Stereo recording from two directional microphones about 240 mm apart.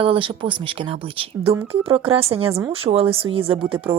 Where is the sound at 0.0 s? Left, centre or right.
Right.